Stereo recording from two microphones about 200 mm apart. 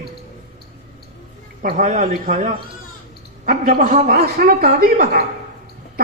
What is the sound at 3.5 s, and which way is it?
A woman's voice, 45° right (ahead or behind).